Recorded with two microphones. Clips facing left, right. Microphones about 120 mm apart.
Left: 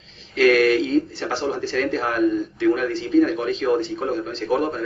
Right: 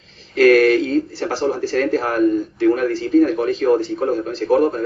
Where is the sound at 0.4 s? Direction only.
40° right (ahead or behind).